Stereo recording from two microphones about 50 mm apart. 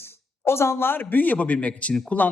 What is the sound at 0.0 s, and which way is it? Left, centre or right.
A man's voice, left.